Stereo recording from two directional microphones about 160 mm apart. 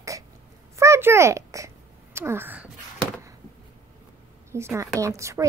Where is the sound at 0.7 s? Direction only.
15° right (ahead or behind).